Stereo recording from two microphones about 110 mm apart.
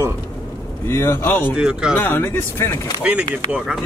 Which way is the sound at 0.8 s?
25° left (ahead or behind).